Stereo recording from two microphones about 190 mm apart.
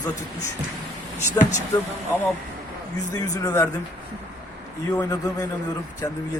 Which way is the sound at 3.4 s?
15° left (ahead or behind).